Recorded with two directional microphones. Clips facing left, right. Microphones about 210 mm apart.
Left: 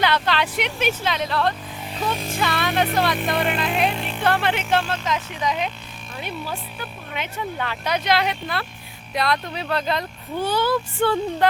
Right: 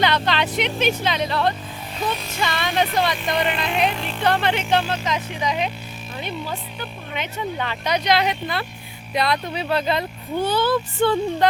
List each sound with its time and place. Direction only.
0.0 s speech: 5° left (ahead or behind)
2.1 s music: 50° left (ahead or behind)
2.4 s speech: 5° left (ahead or behind)
10.4 s speech: 10° left (ahead or behind)